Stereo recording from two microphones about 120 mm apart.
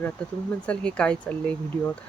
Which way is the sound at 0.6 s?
10° left (ahead or behind).